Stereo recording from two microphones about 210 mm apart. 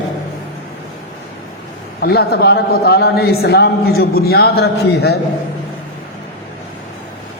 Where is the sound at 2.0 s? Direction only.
50° left (ahead or behind).